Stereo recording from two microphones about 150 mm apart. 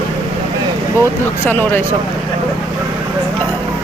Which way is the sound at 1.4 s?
15° left (ahead or behind).